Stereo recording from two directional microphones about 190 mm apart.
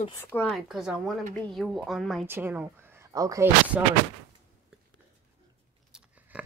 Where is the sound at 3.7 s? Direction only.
5° right (ahead or behind).